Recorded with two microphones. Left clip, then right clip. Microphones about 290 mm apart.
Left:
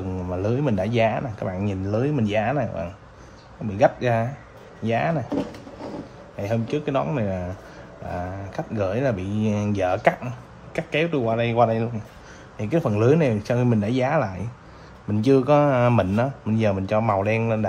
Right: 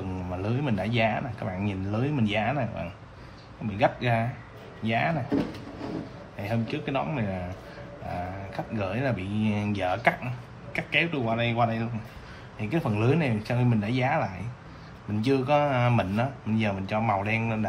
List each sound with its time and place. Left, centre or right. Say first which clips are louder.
0.3 s speech: left 7 dB; left
6.4 s speech: left 6 dB; left